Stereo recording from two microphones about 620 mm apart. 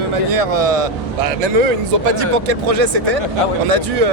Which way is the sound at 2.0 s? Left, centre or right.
Right.